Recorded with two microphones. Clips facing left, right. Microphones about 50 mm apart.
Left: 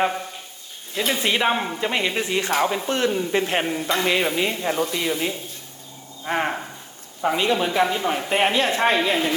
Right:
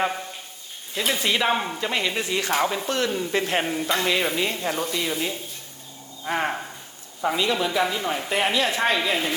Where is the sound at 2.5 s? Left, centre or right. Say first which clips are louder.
Left 1 dB; centre.